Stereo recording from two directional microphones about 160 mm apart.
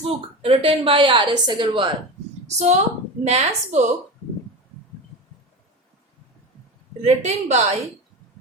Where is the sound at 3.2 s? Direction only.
45° right (ahead or behind).